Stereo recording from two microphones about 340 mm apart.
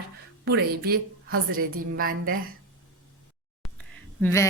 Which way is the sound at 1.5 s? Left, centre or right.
Right.